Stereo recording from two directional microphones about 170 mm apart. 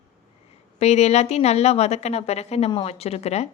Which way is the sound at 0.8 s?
40° left (ahead or behind).